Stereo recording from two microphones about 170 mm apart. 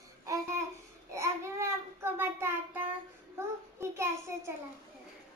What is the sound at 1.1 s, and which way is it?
Child singing, 15° right (ahead or behind).